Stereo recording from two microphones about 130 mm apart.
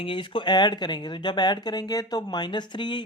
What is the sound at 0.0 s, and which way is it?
Speech, 40° left (ahead or behind).